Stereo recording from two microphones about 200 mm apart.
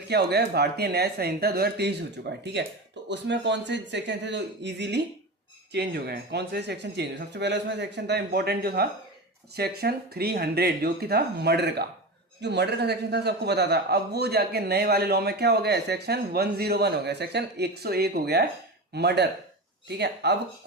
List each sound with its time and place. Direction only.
0.1 s a man's voice: 55° right (ahead or behind)